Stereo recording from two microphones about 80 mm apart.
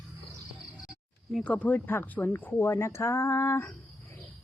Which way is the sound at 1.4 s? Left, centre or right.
Centre.